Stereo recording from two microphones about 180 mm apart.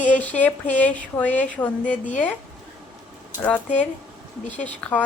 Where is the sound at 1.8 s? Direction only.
45° left (ahead or behind).